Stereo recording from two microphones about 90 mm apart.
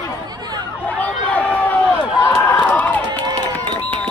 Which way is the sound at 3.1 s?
55° right (ahead or behind).